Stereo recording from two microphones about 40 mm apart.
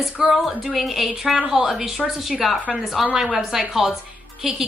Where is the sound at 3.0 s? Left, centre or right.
Centre.